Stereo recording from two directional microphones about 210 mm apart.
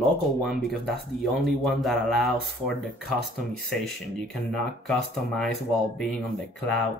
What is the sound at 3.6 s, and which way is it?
Speech, centre (ahead or behind).